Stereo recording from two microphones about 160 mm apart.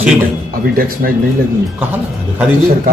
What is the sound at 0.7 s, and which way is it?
Speech, 65° right (ahead or behind).